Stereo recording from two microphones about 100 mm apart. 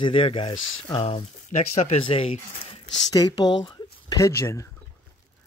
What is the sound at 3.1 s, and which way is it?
Speech, 45° left (ahead or behind).